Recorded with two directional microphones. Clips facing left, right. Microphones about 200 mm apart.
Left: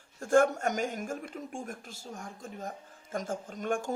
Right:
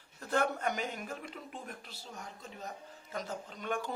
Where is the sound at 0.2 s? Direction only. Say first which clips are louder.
Left 8 dB; 45° left (ahead or behind).